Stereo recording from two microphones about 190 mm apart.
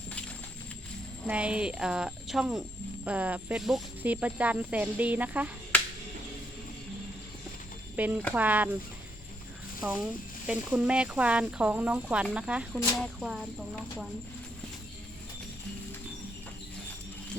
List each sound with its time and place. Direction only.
1.3 s speech: 5° right (ahead or behind)
7.9 s speech: 10° right (ahead or behind)
9.8 s speech: 5° right (ahead or behind)